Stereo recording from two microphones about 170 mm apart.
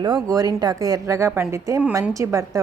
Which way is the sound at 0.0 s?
25° right (ahead or behind).